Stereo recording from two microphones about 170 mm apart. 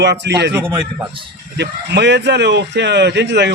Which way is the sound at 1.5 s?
85° right.